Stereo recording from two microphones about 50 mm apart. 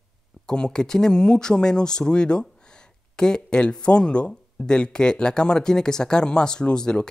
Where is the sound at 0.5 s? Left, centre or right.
Centre.